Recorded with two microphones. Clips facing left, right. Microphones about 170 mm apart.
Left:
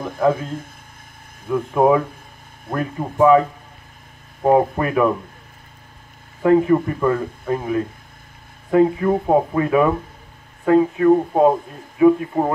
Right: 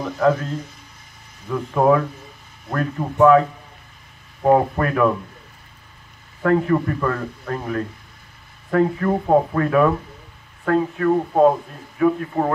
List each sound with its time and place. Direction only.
0.0 s speech: 50° left (ahead or behind)
1.5 s speech: 5° left (ahead or behind)
6.4 s speech: 10° left (ahead or behind)